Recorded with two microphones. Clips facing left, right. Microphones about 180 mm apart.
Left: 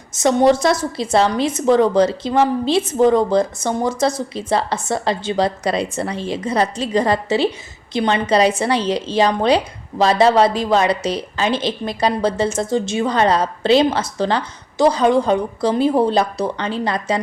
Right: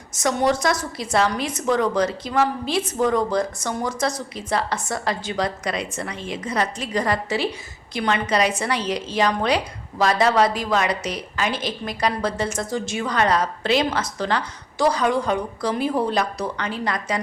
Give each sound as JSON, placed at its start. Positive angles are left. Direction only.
{"t": 0.1, "sound": "a woman's voice", "side_deg": 25}